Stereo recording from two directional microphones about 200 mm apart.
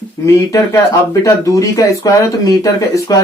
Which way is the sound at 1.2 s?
15° left (ahead or behind).